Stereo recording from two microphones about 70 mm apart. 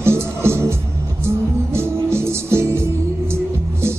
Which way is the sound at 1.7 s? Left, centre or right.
Right.